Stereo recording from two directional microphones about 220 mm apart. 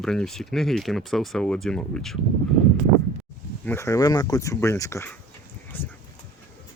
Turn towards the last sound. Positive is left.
turn(degrees=10)  # may be behind; listen again after turning